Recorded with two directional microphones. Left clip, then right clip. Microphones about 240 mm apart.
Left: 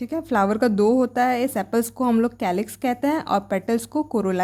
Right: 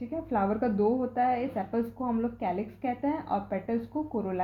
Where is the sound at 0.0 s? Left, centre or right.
Left.